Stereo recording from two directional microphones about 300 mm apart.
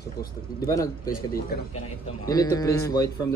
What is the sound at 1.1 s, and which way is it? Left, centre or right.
Speech, left.